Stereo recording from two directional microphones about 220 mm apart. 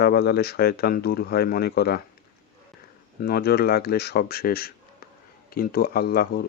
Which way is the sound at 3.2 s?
45° left (ahead or behind).